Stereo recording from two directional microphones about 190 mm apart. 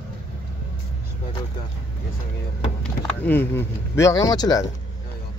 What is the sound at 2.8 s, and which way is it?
Speech, 10° left (ahead or behind).